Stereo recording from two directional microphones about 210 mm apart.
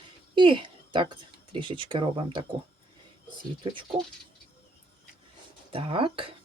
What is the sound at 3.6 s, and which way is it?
Speech, 25° right (ahead or behind).